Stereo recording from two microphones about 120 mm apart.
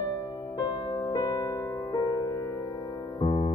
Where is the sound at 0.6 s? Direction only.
35° left (ahead or behind).